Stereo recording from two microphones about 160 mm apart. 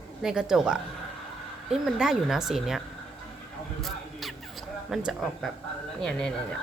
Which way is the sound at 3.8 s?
Centre (ahead or behind).